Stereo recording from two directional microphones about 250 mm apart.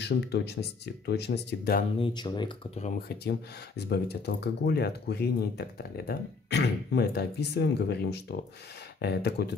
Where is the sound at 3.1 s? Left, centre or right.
Left.